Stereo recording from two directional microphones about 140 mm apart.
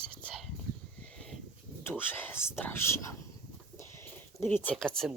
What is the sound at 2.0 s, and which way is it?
Whispering, 15° left (ahead or behind).